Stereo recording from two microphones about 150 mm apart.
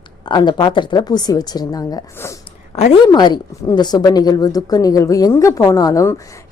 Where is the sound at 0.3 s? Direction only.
30° left (ahead or behind).